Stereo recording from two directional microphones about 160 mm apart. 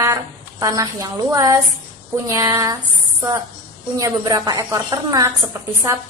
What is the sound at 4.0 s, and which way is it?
A woman's voice, 20° right (ahead or behind).